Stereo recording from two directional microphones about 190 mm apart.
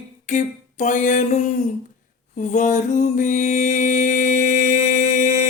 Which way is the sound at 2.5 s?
40° left (ahead or behind).